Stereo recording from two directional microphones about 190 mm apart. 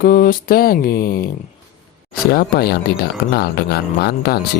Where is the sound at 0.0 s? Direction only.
50° left (ahead or behind).